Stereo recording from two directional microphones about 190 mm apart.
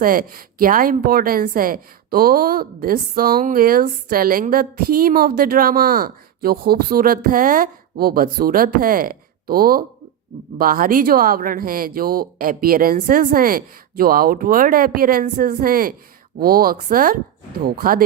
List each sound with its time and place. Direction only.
0.0 s a woman's voice: 50° right (ahead or behind)